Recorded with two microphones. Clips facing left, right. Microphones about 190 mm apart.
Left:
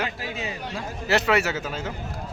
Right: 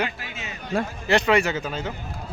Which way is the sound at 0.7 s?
55° right (ahead or behind).